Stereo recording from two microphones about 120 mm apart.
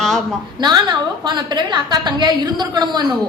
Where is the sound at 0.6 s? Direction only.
40° right (ahead or behind).